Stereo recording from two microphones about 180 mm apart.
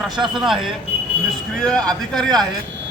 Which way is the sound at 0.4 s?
Centre (ahead or behind).